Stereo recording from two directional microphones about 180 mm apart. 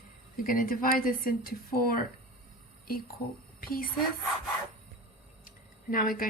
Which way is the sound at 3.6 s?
55° left (ahead or behind).